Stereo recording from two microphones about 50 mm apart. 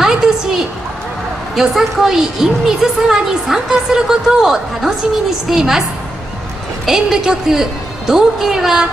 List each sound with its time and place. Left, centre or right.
0.0 s a sound: centre
1.5 s a woman's voice: centre
6.9 s a woman's voice: centre